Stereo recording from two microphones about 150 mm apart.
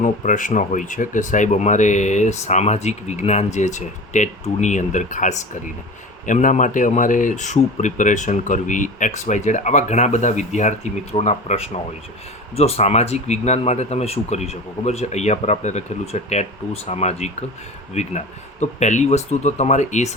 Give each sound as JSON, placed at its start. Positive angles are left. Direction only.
{"t": 0.0, "sound": "speech", "side_deg": 60}